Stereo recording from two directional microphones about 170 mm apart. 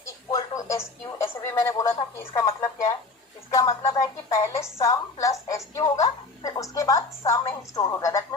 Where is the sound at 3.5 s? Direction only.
20° left (ahead or behind).